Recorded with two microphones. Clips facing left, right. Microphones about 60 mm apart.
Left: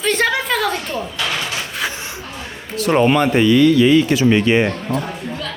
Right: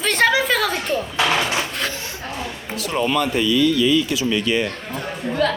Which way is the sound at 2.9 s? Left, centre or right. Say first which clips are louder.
Left 6 dB; left.